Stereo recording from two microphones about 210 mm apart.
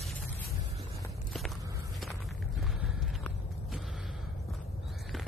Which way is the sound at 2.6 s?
Centre (ahead or behind).